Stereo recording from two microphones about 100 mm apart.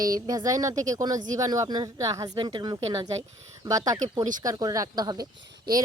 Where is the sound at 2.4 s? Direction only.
50° right (ahead or behind).